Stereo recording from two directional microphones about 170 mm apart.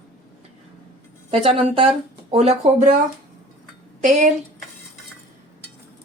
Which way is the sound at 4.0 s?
45° right (ahead or behind).